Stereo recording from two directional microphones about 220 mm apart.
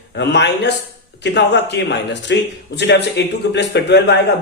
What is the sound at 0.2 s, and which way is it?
A man's voice, 50° left (ahead or behind).